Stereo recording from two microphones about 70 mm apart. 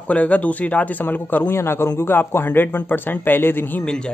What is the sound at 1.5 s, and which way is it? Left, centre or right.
A man's voice, left.